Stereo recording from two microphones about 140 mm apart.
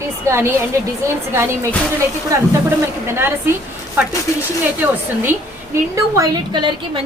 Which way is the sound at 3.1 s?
15° right (ahead or behind).